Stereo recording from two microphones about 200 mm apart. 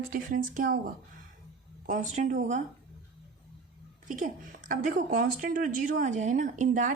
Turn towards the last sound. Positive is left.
turn(degrees=-40)  # may be behind; listen again after turning